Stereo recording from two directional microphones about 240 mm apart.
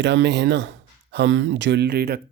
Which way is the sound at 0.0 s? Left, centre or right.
Right.